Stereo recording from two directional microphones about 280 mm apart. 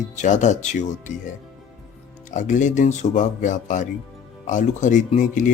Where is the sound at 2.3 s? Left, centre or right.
Left.